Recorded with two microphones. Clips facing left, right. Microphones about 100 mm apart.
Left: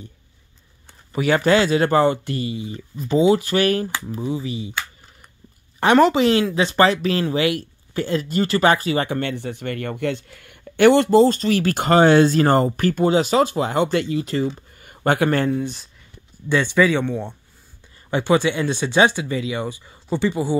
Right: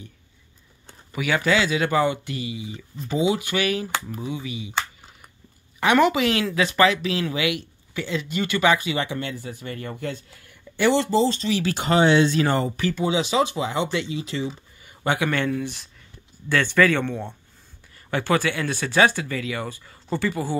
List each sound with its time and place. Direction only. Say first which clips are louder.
1.1 s speech: left 5 dB; 45° left (ahead or behind)
4.1 s speech: left 5 dB; 35° left (ahead or behind)
5.9 s speech: left 5 dB; 35° left (ahead or behind)
15.5 s speech: left 4 dB; 30° left (ahead or behind)
16.4 s speech: left 2 dB; 15° left (ahead or behind)